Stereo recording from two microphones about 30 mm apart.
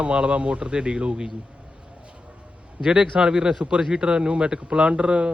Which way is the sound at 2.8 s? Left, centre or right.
Right.